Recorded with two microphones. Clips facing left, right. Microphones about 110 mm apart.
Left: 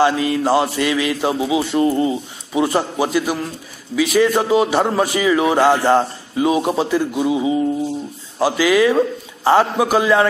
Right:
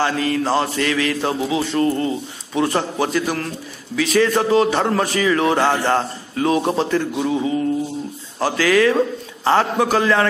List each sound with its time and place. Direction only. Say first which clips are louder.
0.0 s a man's voice: left 3 dB; 15° left (ahead or behind)